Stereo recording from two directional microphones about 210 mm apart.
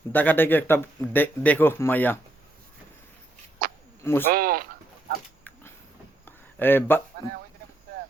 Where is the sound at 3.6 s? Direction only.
40° right (ahead or behind).